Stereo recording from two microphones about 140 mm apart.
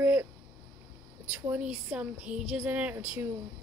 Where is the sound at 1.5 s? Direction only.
10° right (ahead or behind).